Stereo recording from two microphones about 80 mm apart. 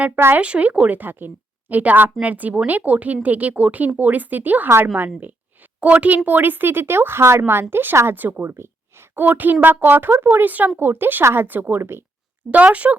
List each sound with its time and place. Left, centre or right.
0.2 s speech: right
0.4 s speech: centre
5.8 s speech: centre
12.5 s speech: centre